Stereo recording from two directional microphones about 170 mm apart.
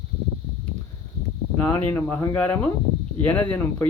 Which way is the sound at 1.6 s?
10° left (ahead or behind).